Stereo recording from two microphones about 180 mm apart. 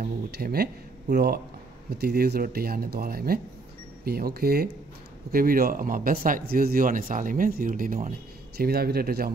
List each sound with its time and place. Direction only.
0.0 s speech: 60° right (ahead or behind)
8.5 s speech: 60° right (ahead or behind)